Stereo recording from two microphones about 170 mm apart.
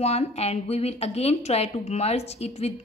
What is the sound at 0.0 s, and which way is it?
A woman's voice, 40° left (ahead or behind).